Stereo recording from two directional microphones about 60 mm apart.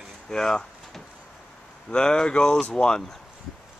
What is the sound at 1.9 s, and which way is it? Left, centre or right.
Speech, centre.